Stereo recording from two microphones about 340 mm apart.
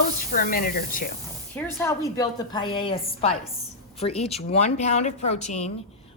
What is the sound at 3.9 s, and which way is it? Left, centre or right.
Speech, centre.